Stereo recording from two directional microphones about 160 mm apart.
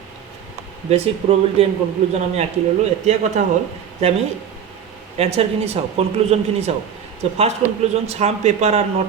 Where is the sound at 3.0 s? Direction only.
45° right (ahead or behind).